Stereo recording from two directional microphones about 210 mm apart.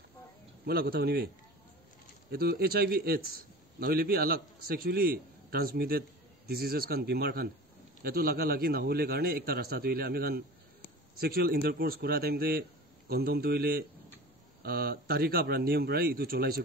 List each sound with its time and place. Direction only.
0.7 s a man's voice: 45° right (ahead or behind)
2.3 s a man's voice: 45° right (ahead or behind)